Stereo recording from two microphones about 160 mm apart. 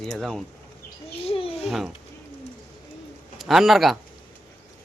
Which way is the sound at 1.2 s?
35° left (ahead or behind).